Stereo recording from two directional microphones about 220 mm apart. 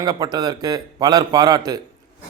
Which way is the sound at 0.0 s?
15° right (ahead or behind).